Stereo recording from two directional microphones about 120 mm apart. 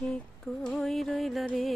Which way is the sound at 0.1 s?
5° left (ahead or behind).